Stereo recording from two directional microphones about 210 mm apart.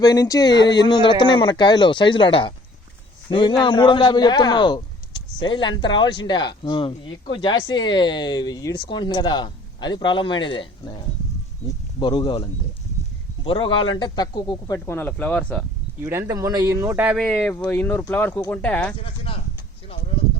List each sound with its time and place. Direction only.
0.0 s a man's voice: 15° left (ahead or behind)
16.0 s speech: 10° right (ahead or behind); by 18.9 s 5° left (ahead or behind)